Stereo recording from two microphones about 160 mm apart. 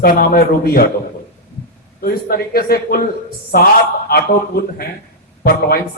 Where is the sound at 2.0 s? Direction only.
65° left (ahead or behind).